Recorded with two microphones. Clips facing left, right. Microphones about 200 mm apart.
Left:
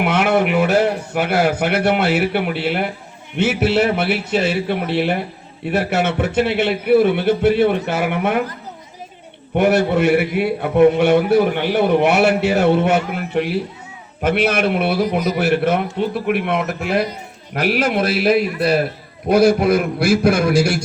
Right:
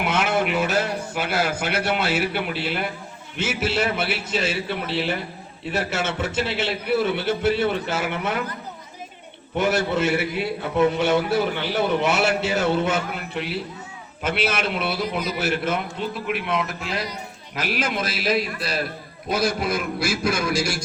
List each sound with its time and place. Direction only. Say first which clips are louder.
0.0 s a man's voice: left 6 dB; 60° left (ahead or behind)
9.6 s a man's voice: left 6 dB; 60° left (ahead or behind)
15.4 s a man's voice: left 8 dB; 60° left (ahead or behind)